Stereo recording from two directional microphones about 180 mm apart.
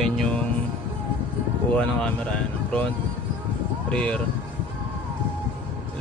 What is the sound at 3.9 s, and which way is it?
Speech, 5° left (ahead or behind).